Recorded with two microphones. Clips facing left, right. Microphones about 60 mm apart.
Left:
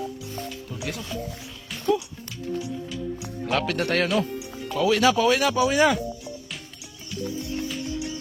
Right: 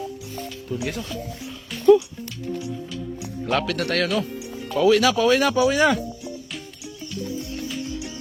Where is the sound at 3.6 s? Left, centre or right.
Centre.